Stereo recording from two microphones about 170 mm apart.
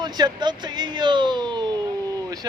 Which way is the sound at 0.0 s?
25° right (ahead or behind).